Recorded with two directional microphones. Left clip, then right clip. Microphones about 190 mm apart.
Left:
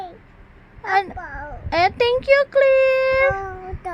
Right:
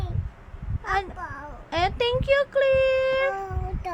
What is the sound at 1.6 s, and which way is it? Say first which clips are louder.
A child's voice: left 7 dB; 20° left (ahead or behind).